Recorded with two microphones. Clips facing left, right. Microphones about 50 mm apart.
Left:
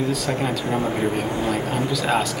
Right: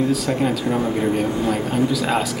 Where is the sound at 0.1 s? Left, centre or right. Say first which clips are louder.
Right 3 dB; centre.